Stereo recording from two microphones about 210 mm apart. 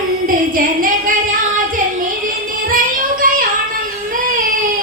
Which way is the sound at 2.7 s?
40° right (ahead or behind).